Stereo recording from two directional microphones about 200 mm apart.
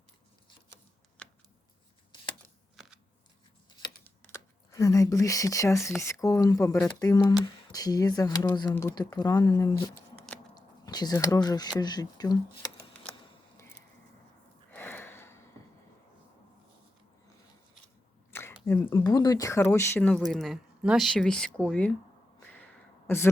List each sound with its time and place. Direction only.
4.3 s speech: 15° left (ahead or behind)
14.7 s a sound: 10° left (ahead or behind)
18.3 s speech: 10° left (ahead or behind)
23.0 s speech: 10° left (ahead or behind)